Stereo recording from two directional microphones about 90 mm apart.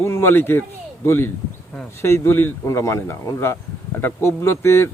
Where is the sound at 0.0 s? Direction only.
30° left (ahead or behind).